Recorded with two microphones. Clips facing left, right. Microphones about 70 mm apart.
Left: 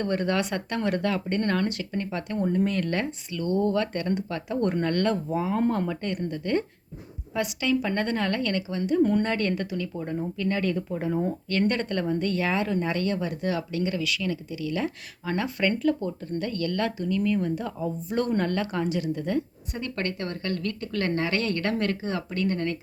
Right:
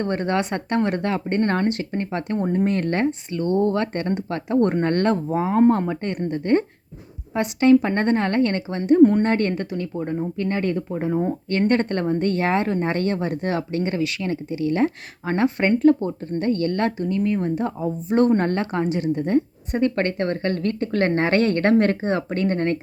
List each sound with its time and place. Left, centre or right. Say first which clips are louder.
0.0 s speech: right 3 dB; right